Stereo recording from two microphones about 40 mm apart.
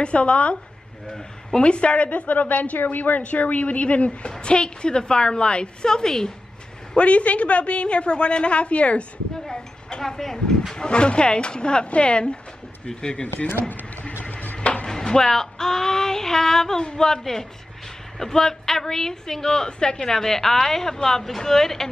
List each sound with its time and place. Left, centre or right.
0.0 s a woman's voice: left
3.2 s a woman's voice: left; by 6.3 s centre
7.0 s a woman's voice: left
9.5 s speech: centre
10.7 s a woman's voice: left
14.2 s a sound: left
14.9 s a woman's voice: centre